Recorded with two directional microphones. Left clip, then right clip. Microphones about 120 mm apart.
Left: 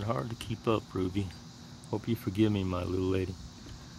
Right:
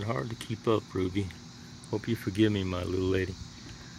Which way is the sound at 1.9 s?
15° left (ahead or behind).